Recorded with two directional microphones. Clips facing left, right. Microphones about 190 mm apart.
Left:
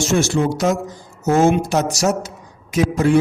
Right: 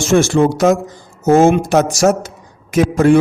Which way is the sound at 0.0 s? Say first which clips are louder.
Right 5 dB; 50° right (ahead or behind).